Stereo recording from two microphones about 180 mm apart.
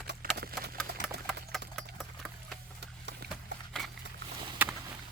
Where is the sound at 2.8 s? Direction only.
75° right (ahead or behind).